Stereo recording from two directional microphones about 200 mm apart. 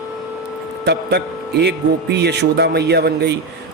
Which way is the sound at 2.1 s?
60° right (ahead or behind).